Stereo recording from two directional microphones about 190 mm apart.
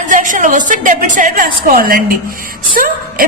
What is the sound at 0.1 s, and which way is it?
A woman's voice, 45° right (ahead or behind).